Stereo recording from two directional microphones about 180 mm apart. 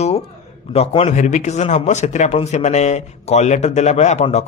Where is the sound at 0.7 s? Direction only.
35° left (ahead or behind).